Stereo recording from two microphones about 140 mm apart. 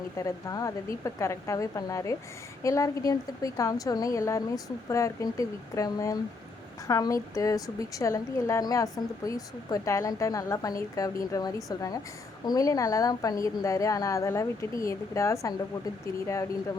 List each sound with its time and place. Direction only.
0.2 s a woman's voice: 25° left (ahead or behind)